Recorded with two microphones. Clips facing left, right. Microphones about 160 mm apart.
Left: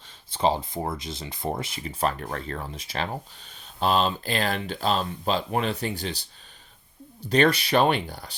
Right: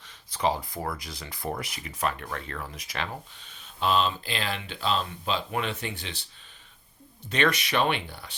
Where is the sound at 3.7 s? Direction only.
40° left (ahead or behind).